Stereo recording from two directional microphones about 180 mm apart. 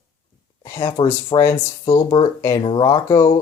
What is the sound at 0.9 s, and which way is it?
Speech, 20° left (ahead or behind).